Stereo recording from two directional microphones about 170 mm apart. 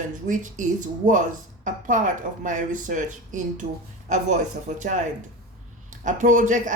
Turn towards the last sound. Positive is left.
turn(degrees=-50)  # may be behind; listen again after turning